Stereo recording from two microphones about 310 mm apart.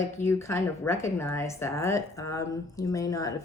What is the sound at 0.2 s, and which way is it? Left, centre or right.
Speech, centre.